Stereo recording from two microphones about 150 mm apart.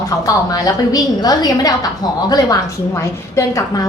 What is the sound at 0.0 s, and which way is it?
A woman's voice, 25° left (ahead or behind).